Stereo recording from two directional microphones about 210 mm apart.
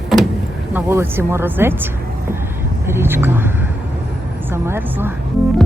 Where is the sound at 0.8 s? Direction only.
10° right (ahead or behind).